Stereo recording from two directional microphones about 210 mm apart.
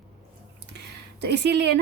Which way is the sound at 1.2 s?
55° right (ahead or behind).